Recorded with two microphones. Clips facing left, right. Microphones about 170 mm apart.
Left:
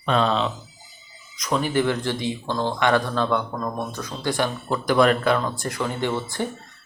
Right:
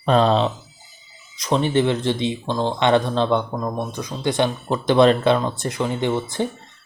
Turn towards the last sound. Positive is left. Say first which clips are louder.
# right 3 dB
turn(degrees=-20)  # may be behind; listen again after turning